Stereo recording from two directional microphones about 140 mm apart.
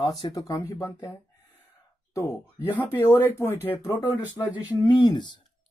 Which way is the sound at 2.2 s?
20° left (ahead or behind).